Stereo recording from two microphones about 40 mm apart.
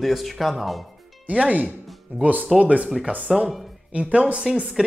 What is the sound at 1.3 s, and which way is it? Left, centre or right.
Speech, right.